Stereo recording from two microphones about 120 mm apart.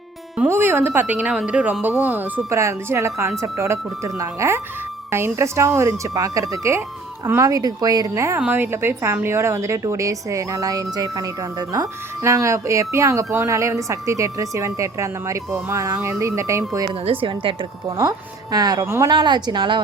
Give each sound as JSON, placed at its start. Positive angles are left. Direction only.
{"t": 0.4, "sound": "speech", "side_deg": -20}
{"t": 8.4, "sound": "speech", "side_deg": -15}
{"t": 16.9, "sound": "a woman's voice", "side_deg": -50}
{"t": 17.8, "sound": "a woman's voice", "side_deg": -30}